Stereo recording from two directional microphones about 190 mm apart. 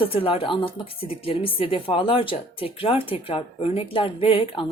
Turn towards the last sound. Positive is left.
turn(degrees=30)  # may be behind; listen again after turning